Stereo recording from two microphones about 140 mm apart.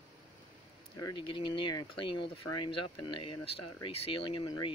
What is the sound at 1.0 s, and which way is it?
Speech, 30° left (ahead or behind).